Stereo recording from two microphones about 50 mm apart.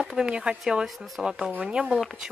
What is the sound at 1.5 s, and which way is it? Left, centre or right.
Speech, right.